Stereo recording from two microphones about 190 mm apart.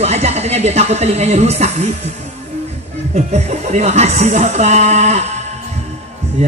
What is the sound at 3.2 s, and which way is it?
Speech, 35° right (ahead or behind).